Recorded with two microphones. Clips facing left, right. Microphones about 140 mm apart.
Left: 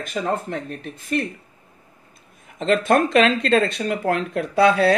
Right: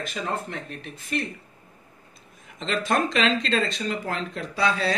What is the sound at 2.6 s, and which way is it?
Speech, 50° left (ahead or behind).